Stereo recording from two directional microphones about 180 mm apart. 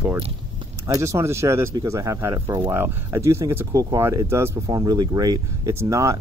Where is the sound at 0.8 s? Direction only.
15° right (ahead or behind).